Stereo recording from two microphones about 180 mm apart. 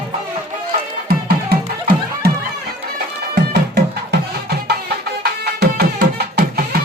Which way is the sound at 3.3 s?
65° right (ahead or behind).